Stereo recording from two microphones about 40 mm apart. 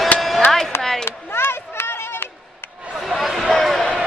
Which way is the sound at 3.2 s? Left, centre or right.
Centre.